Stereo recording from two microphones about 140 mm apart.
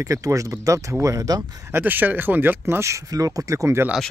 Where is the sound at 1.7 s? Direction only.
15° right (ahead or behind).